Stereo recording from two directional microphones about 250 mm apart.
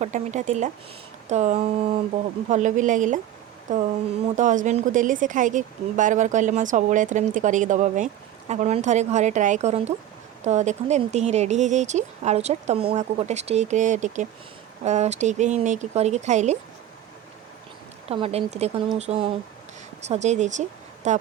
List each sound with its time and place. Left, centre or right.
0.0 s a woman's voice: right
18.1 s a woman's voice: right